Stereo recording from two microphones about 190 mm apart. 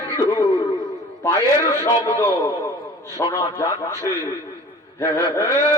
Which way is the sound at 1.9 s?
15° left (ahead or behind).